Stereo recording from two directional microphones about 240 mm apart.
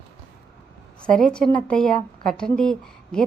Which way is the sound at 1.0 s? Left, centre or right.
Centre.